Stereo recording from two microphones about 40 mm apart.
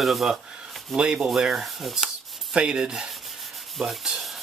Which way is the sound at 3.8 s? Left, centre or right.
Centre.